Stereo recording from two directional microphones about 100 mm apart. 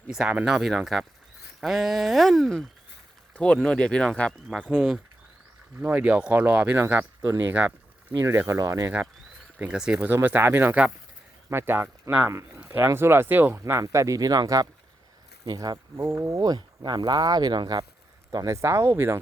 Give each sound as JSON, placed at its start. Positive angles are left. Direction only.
{"t": 0.1, "sound": "speech", "side_deg": -10}
{"t": 5.8, "sound": "speech", "side_deg": -15}
{"t": 8.2, "sound": "speech", "side_deg": -30}
{"t": 9.6, "sound": "speech", "side_deg": -10}
{"t": 16.0, "sound": "speech", "side_deg": -30}
{"t": 18.4, "sound": "speech", "side_deg": -30}